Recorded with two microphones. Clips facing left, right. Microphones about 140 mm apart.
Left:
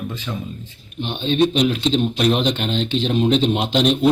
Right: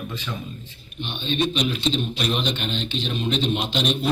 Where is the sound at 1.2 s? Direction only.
90° left.